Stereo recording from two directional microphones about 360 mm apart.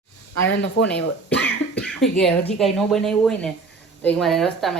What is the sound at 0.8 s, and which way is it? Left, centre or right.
Speech, centre.